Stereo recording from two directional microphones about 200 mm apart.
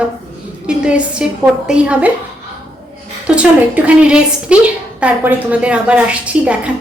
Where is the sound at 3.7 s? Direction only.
5° right (ahead or behind).